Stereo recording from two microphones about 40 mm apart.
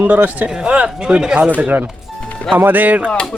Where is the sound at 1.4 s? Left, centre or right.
Right.